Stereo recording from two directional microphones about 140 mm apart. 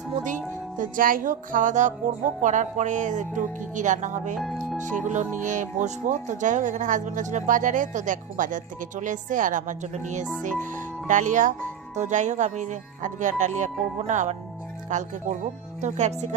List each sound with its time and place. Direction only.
0.8 s music: 75° right (ahead or behind); by 1.9 s 60° right (ahead or behind)
2.4 s speech: 60° right (ahead or behind)